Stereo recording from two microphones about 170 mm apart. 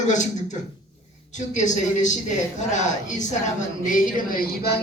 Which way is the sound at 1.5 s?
45° left (ahead or behind).